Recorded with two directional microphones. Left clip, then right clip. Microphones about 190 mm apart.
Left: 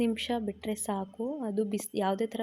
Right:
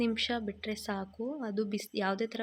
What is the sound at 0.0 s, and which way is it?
A woman's voice, 15° left (ahead or behind).